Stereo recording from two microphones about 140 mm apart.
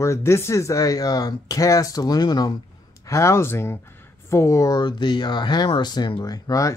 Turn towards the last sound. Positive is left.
turn(degrees=25)  # may be behind; listen again after turning